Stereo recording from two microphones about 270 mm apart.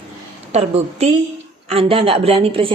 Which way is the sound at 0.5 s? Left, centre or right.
Right.